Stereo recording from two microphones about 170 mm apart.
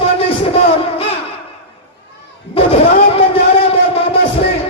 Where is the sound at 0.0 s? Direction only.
35° left (ahead or behind).